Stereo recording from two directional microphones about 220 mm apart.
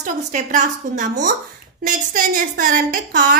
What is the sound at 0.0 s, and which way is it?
A woman's voice, 35° right (ahead or behind).